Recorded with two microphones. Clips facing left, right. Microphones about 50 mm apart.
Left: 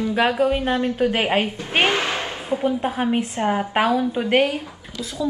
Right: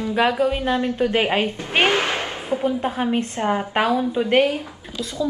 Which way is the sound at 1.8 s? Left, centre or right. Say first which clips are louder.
Right 1 dB; right.